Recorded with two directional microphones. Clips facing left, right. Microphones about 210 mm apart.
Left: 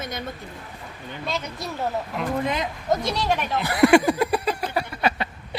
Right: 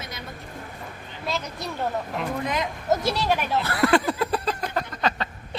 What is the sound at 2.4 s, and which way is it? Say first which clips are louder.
Speech: left 1 dB; 25° left (ahead or behind).